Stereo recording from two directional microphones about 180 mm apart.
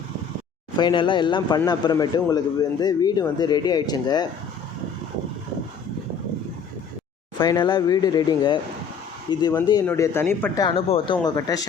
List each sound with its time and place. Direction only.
0.8 s a man's voice: 25° left (ahead or behind)
7.3 s a man's voice: 25° left (ahead or behind)
9.8 s a man's voice: 10° left (ahead or behind)
10.8 s a man's voice: 30° left (ahead or behind)